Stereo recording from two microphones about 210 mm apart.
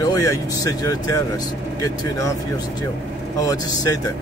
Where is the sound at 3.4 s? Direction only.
15° left (ahead or behind).